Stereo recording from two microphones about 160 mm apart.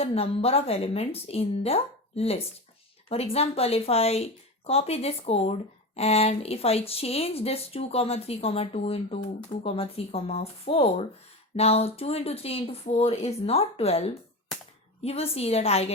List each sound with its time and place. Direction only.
0.0 s speech: 40° left (ahead or behind)